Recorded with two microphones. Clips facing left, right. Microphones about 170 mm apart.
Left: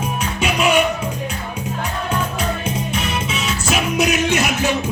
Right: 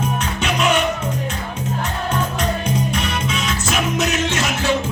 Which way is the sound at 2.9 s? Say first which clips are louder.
Even; 5° left (ahead or behind).